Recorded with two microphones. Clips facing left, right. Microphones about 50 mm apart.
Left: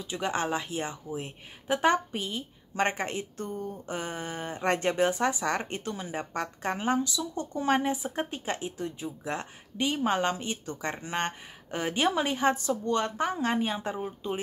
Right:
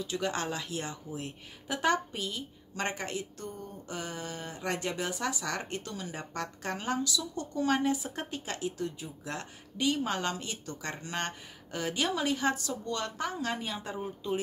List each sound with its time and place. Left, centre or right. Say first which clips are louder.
0.0 s speech: left 2 dB; left